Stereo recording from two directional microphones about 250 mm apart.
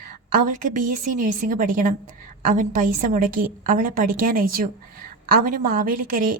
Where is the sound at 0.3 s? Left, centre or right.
Right.